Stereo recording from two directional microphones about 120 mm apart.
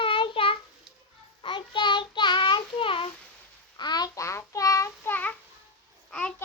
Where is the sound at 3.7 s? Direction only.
35° left (ahead or behind); by 5.3 s 15° left (ahead or behind).